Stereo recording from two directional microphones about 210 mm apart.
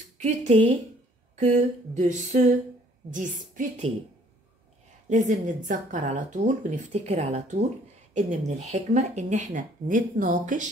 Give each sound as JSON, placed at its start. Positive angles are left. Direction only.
{"t": 0.2, "sound": "speech", "side_deg": -35}
{"t": 5.1, "sound": "speech", "side_deg": -35}